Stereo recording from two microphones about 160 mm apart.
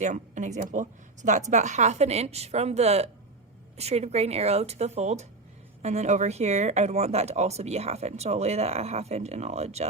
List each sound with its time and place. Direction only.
0.0 s speech: 50° right (ahead or behind)